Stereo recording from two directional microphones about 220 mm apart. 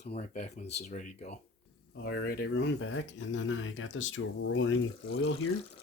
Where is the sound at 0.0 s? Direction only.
40° left (ahead or behind); by 4.8 s 60° left (ahead or behind).